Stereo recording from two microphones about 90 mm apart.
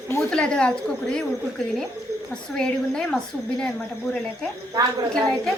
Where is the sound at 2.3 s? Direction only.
10° left (ahead or behind).